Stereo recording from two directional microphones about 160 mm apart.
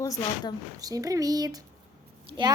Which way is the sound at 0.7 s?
20° right (ahead or behind).